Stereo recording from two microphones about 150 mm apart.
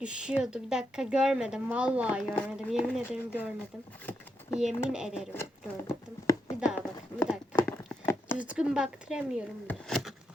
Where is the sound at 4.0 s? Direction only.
10° left (ahead or behind).